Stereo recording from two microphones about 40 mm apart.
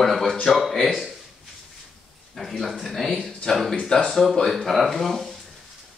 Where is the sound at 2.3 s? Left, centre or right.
Centre.